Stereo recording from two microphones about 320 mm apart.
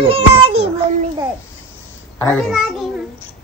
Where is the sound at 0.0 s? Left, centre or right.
Centre.